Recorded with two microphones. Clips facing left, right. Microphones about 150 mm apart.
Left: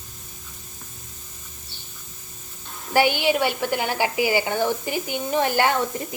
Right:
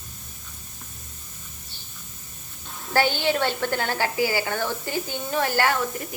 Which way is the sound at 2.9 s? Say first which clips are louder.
Left 3 dB; 15° left (ahead or behind).